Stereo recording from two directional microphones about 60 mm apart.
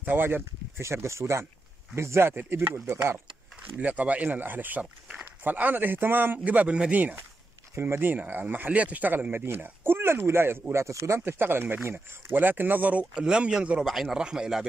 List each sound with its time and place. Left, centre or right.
0.0 s speech: right
3.8 s speech: right
7.7 s speech: right; by 14.7 s centre